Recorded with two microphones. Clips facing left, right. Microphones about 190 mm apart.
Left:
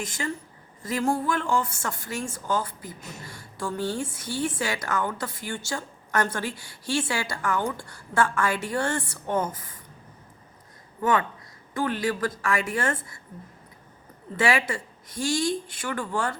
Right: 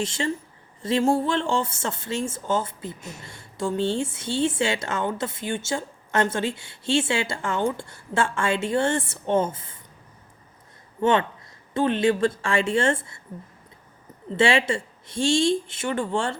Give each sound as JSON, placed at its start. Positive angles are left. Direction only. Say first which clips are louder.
{"t": 0.0, "sound": "speech", "louder": "right 5 dB", "side_deg": -25}
{"t": 11.0, "sound": "speech", "louder": "right 3 dB", "side_deg": -25}
{"t": 14.3, "sound": "speech", "louder": "right 4 dB", "side_deg": -25}